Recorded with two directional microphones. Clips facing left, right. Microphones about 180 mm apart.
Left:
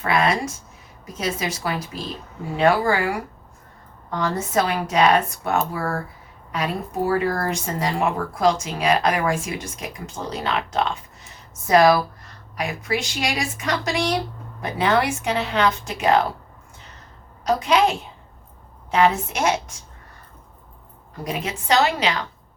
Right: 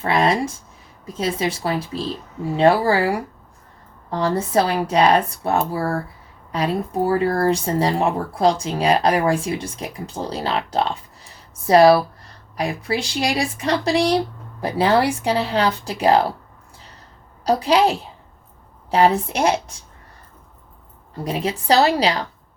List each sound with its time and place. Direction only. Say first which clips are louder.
0.0 s a woman's voice: right 2 dB; 30° right (ahead or behind)
17.4 s speech: right 2 dB; 35° right (ahead or behind)
21.2 s speech: right 4 dB; 30° right (ahead or behind)